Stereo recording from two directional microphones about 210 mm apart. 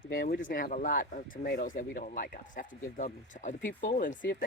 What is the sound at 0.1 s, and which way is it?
Speech, 40° left (ahead or behind).